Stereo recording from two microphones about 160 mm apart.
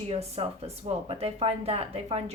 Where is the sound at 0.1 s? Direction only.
40° right (ahead or behind).